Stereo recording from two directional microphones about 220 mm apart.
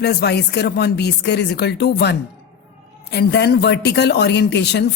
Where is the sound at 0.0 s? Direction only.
45° left (ahead or behind).